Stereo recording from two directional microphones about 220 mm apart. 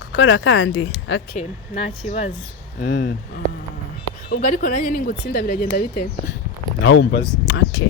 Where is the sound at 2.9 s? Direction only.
50° left (ahead or behind).